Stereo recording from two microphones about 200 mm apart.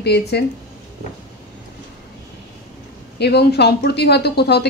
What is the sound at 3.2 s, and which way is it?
A woman's voice, 55° left (ahead or behind).